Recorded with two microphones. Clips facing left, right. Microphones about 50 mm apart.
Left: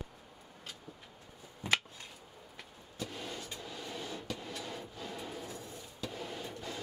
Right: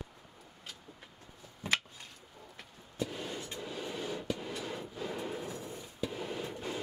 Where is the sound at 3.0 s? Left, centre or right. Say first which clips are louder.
Right 4 dB; centre.